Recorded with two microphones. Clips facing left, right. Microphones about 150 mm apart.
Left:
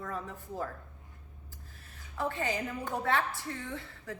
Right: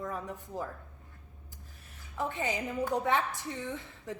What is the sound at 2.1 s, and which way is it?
A woman's voice, 20° right (ahead or behind).